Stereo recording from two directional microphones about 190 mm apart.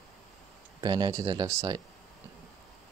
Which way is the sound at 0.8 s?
20° right (ahead or behind).